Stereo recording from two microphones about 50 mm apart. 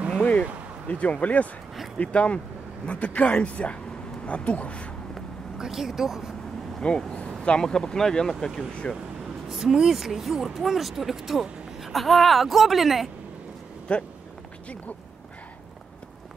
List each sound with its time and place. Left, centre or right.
0.2 s speech: left
5.6 s speech: centre
6.8 s speech: centre
9.5 s speech: centre
13.9 s speech: left